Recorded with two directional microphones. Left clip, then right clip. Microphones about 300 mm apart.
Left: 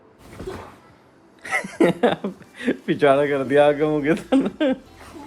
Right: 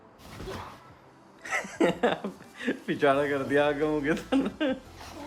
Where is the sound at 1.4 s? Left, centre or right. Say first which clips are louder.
Left 7 dB; left.